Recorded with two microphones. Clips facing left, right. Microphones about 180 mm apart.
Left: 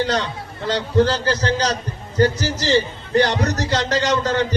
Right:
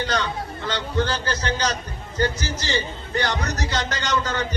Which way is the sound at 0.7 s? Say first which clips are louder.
Left 7 dB; 35° left (ahead or behind).